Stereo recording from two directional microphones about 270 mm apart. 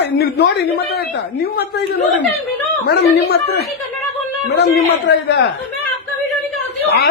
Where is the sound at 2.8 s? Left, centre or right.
Left.